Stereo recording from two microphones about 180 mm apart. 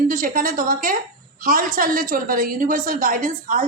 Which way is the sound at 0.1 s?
50° right (ahead or behind).